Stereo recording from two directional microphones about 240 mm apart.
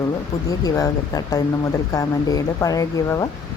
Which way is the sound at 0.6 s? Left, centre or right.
Centre.